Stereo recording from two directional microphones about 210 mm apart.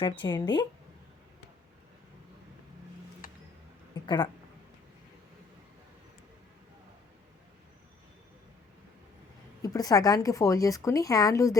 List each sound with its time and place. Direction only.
0.0 s speech: 20° left (ahead or behind)
3.2 s music: 45° left (ahead or behind)
4.0 s speech: 20° left (ahead or behind)
9.6 s a woman's voice: 15° left (ahead or behind)